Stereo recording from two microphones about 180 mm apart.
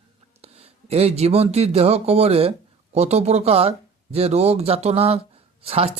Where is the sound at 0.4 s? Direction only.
35° right (ahead or behind).